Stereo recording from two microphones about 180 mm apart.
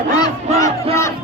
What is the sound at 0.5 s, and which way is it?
Music, 15° left (ahead or behind).